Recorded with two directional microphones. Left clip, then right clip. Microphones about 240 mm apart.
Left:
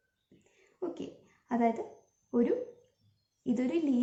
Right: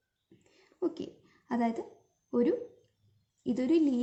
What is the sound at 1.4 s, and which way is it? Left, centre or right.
Speech, right.